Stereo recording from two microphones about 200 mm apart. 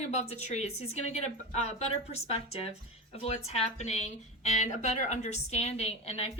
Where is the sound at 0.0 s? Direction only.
35° left (ahead or behind).